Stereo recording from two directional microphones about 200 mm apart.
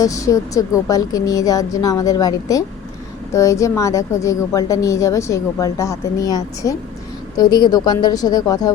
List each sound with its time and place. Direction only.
0.0 s a woman's voice: 15° left (ahead or behind)